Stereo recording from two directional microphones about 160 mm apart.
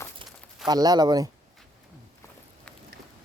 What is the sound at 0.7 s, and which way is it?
Speech, 25° right (ahead or behind).